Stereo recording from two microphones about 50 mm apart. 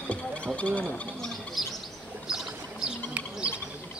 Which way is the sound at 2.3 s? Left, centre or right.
Centre.